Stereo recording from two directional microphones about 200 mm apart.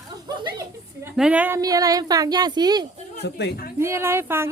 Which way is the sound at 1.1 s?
5° right (ahead or behind).